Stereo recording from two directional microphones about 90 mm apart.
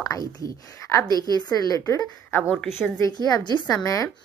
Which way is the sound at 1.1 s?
45° left (ahead or behind).